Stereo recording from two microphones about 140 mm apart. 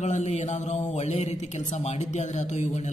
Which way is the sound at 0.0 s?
55° left (ahead or behind).